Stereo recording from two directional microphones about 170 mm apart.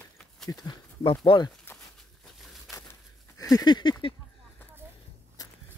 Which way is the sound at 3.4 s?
20° left (ahead or behind).